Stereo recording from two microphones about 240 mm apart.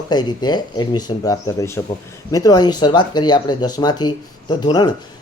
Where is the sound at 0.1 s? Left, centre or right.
Centre.